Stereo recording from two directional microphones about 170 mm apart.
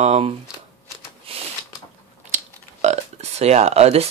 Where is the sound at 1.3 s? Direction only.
35° right (ahead or behind).